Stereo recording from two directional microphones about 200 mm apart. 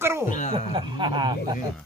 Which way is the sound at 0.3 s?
35° left (ahead or behind).